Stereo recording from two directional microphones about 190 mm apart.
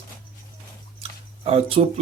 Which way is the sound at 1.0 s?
30° right (ahead or behind).